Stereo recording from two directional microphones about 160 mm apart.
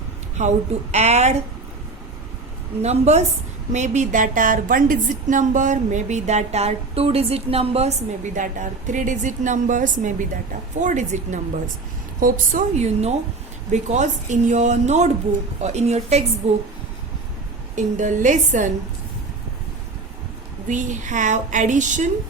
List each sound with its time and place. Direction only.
0.3 s a woman's voice: 45° right (ahead or behind)
2.8 s a woman's voice: 45° right (ahead or behind)
17.7 s a woman's voice: 50° right (ahead or behind)
20.7 s a woman's voice: 50° right (ahead or behind)